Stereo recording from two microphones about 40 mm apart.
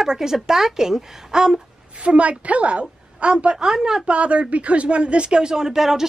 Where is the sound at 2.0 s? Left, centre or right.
Right; by 4.0 s centre.